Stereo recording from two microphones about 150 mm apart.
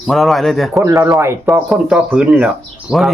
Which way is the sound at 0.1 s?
Centre (ahead or behind).